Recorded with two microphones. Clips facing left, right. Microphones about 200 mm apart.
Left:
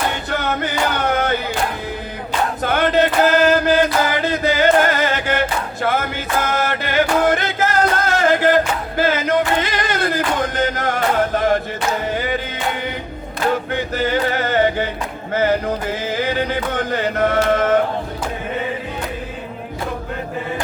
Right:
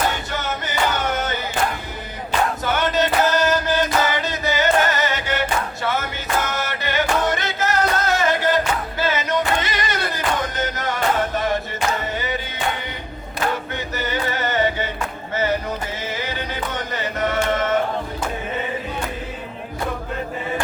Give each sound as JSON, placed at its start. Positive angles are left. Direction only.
{"t": 0.3, "sound": "music", "side_deg": 60}
{"t": 2.6, "sound": "chant", "side_deg": 55}
{"t": 4.2, "sound": "music", "side_deg": 55}
{"t": 13.9, "sound": "a sound", "side_deg": 55}
{"t": 15.3, "sound": "music", "side_deg": 55}
{"t": 16.0, "sound": "chant", "side_deg": 55}